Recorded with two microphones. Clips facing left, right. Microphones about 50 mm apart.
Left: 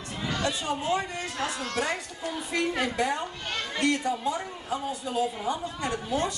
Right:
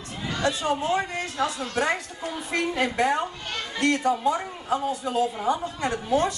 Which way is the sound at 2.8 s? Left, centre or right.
Right.